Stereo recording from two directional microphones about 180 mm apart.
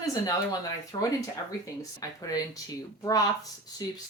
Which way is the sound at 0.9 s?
25° left (ahead or behind).